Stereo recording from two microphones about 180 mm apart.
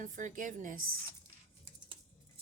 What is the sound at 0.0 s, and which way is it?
Speech, 45° right (ahead or behind).